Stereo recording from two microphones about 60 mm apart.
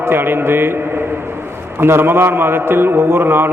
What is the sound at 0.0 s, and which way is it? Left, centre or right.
Speech, right.